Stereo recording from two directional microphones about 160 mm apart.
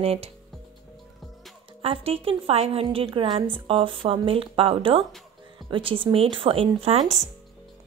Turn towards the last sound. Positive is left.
turn(degrees=-45)  # may be behind; listen again after turning